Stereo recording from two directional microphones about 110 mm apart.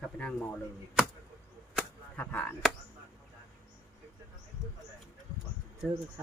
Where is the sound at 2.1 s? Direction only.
15° left (ahead or behind).